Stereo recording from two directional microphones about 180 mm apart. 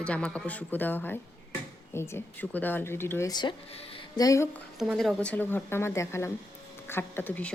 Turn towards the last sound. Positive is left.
turn(degrees=10)  # may be behind; listen again after turning